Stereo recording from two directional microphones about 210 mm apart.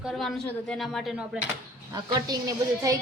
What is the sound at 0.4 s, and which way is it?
Speech, 5° left (ahead or behind).